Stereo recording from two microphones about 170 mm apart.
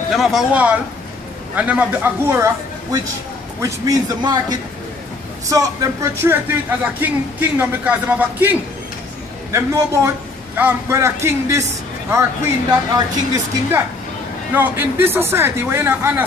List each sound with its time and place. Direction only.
0.1 s a man's voice: centre (ahead or behind)
12.9 s speech: 20° right (ahead or behind)